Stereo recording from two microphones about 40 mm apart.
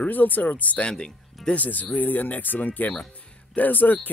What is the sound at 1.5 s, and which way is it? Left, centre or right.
Speech, left.